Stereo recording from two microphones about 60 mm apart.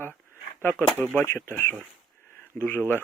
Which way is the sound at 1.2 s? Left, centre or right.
Left.